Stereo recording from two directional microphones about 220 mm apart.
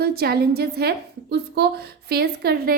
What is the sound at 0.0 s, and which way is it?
A woman's voice, 45° right (ahead or behind).